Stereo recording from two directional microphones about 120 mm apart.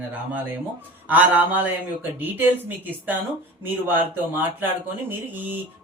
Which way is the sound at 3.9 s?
15° right (ahead or behind).